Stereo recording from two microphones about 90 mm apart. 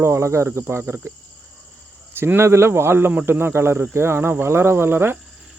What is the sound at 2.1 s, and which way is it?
Speech, 25° right (ahead or behind).